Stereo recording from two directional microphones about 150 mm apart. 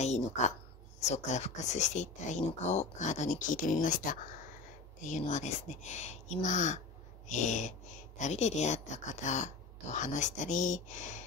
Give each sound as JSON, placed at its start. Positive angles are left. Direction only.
{"t": 0.0, "sound": "a sound", "side_deg": 50}
{"t": 1.0, "sound": "speech", "side_deg": 50}
{"t": 5.0, "sound": "speech", "side_deg": 55}